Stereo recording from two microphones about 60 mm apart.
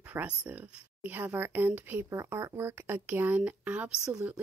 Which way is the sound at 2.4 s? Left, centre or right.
Right.